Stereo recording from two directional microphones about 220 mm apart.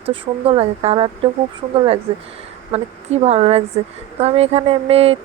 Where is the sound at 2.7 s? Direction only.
30° right (ahead or behind).